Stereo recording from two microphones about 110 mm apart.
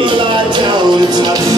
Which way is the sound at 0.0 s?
45° right (ahead or behind).